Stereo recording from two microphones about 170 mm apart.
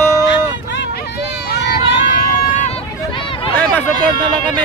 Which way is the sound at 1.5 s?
65° left (ahead or behind).